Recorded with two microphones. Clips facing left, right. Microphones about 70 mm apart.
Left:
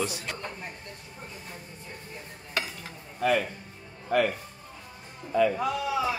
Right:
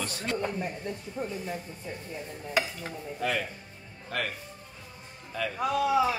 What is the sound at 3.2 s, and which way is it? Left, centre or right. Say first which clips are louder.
Speech: left 5 dB; centre.